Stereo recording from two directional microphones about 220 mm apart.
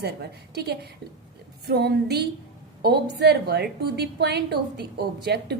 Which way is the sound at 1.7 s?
50° right (ahead or behind).